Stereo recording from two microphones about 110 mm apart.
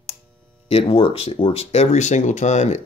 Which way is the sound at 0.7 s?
65° left (ahead or behind).